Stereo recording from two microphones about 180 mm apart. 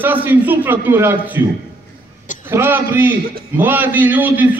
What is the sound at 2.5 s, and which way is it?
A man's voice, 10° right (ahead or behind).